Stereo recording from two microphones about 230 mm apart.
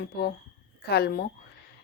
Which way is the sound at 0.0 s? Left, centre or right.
Left.